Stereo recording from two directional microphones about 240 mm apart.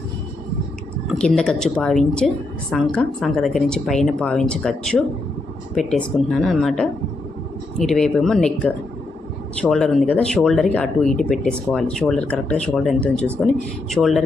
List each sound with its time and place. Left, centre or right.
1.0 s a woman's voice: centre